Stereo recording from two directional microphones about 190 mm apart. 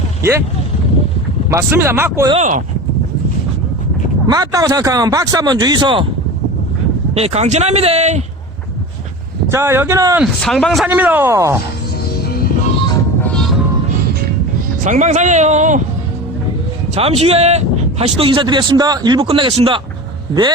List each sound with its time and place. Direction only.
0.2 s speech: 15° right (ahead or behind)
1.5 s speech: 15° right (ahead or behind)
2.3 s speech: 40° right (ahead or behind)
4.3 s a man's voice: 20° right (ahead or behind)
7.1 s speech: 35° right (ahead or behind)
9.5 s speech: 15° right (ahead or behind)
10.4 s speech: centre (ahead or behind); by 11.6 s 15° right (ahead or behind)
12.2 s music: 55° left (ahead or behind)
14.8 s speech: 40° right (ahead or behind)
16.9 s a man's voice: 30° right (ahead or behind)